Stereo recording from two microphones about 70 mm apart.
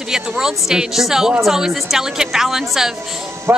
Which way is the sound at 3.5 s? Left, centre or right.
Right.